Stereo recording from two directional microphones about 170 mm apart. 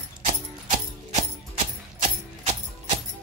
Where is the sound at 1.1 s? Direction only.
40° right (ahead or behind).